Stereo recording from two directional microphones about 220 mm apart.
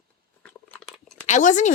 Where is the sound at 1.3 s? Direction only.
35° left (ahead or behind).